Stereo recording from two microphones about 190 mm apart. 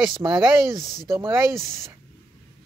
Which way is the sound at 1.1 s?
15° right (ahead or behind).